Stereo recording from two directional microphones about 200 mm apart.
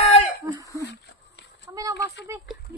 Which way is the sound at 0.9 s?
60° left (ahead or behind).